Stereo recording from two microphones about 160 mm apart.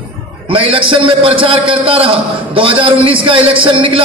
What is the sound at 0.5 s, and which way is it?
A man's voice, 35° right (ahead or behind).